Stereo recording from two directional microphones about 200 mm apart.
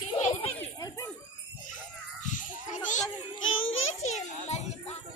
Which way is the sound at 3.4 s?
80° left.